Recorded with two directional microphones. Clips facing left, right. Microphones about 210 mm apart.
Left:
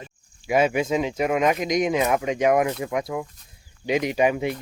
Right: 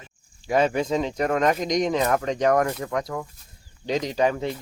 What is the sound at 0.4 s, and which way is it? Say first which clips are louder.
A man's voice: left 1 dB; 10° left (ahead or behind).